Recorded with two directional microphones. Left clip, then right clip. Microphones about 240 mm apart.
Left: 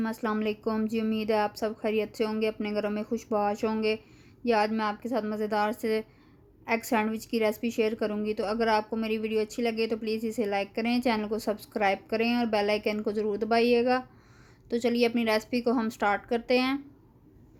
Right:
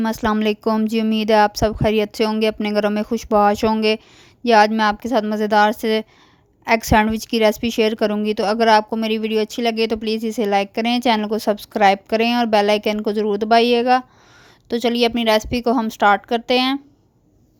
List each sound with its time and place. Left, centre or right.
0.0 s a woman's voice: right